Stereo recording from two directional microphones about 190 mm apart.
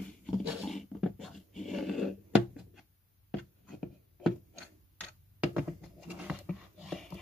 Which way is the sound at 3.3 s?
Centre (ahead or behind).